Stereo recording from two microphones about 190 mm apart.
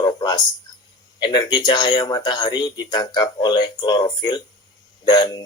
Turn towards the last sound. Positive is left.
turn(degrees=20)  # may be behind; listen again after turning